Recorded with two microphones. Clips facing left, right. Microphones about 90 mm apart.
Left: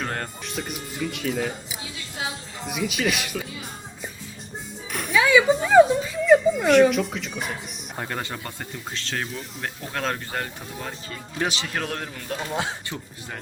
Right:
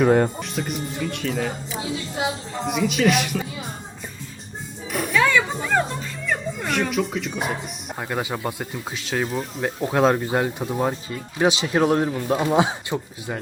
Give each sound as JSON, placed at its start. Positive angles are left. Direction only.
{"t": 0.0, "sound": "speech", "side_deg": -10}
{"t": 0.4, "sound": "speech", "side_deg": 0}
{"t": 2.6, "sound": "speech", "side_deg": 0}
{"t": 4.9, "sound": "a sound", "side_deg": 0}
{"t": 7.9, "sound": "a man's voice", "side_deg": -10}